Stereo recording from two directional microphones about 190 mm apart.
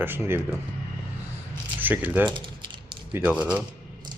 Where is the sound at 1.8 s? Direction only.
10° right (ahead or behind).